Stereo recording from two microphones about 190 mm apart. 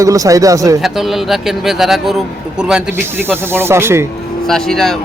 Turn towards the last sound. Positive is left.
turn(degrees=5)  # may be behind; listen again after turning